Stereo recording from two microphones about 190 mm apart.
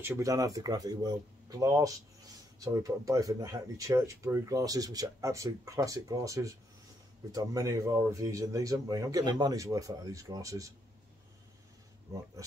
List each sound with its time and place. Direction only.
0.0 s speech: 15° right (ahead or behind)